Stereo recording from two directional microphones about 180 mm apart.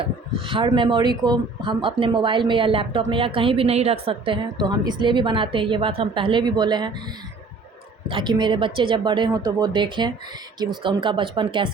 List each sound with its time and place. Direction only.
0.0 s speech: 30° right (ahead or behind)
8.0 s speech: 25° right (ahead or behind)